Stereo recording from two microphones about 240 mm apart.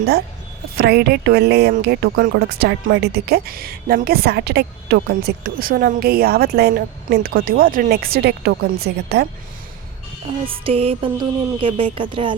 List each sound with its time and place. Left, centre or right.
0.8 s speech: right
10.4 s music: right